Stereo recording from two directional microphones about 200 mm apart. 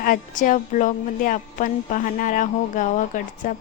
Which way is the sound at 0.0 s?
45° left (ahead or behind).